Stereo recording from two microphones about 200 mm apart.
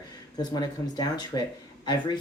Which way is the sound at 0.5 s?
20° left (ahead or behind).